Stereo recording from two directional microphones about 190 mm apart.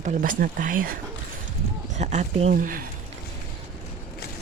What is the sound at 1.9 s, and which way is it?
Speech, 40° right (ahead or behind).